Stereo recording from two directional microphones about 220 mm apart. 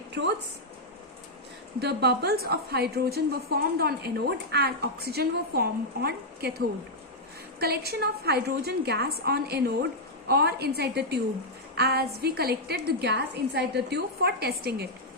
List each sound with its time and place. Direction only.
0.1 s a woman's voice: 50° right (ahead or behind)
1.8 s a woman's voice: 50° right (ahead or behind)
7.6 s a woman's voice: 45° right (ahead or behind)